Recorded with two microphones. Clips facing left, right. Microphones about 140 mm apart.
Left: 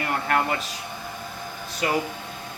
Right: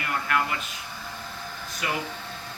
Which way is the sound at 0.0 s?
35° left (ahead or behind).